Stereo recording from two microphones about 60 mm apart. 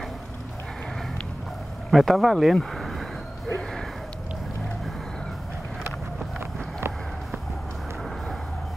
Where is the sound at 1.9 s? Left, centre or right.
Centre.